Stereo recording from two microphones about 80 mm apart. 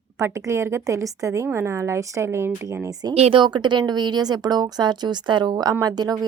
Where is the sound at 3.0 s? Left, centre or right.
Right.